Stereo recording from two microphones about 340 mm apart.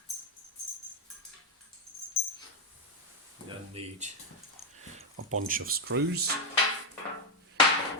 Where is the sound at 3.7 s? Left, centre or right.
Centre.